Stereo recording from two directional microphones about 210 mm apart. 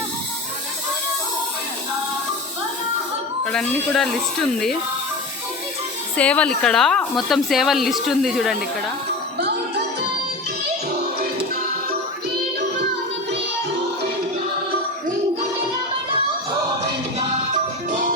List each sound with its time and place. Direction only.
3.4 s speech: 5° left (ahead or behind)
6.1 s speech: 5° left (ahead or behind)
17.2 s music: 40° right (ahead or behind)